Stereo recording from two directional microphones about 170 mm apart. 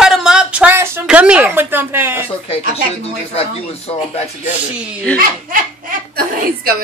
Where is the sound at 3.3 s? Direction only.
35° left (ahead or behind).